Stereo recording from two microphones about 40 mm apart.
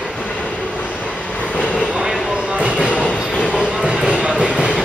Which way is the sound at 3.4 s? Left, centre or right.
Left.